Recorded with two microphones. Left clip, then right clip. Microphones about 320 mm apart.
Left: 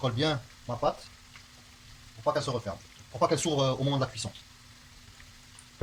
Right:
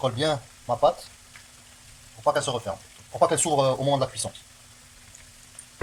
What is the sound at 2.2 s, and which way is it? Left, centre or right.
Speech, centre.